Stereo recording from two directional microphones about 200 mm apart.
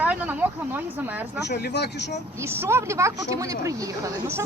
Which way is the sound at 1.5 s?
55° left (ahead or behind).